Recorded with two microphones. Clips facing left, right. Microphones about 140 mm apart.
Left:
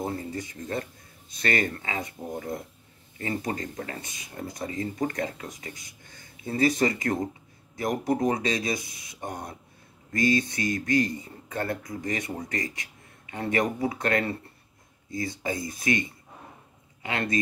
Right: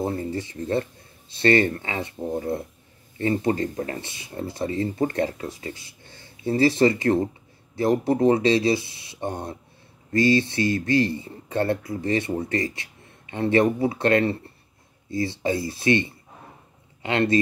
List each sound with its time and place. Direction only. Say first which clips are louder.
0.0 s speech: right 5 dB; 35° right (ahead or behind)